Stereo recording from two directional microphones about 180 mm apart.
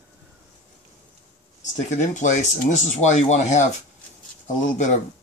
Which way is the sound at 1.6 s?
45° left (ahead or behind).